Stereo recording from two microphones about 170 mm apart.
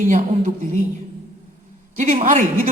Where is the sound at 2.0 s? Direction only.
45° right (ahead or behind).